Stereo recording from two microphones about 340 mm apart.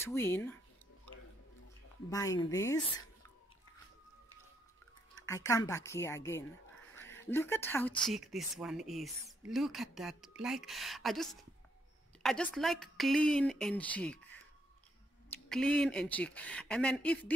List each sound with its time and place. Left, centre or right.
0.0 s a woman's voice: centre
2.0 s a woman's voice: centre
5.1 s a woman's voice: centre
15.5 s speech: centre